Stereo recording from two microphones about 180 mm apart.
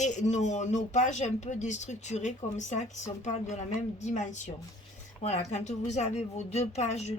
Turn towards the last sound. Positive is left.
turn(degrees=35)  # may be behind; listen again after turning